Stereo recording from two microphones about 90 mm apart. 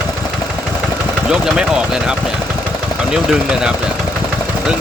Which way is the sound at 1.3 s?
10° right (ahead or behind).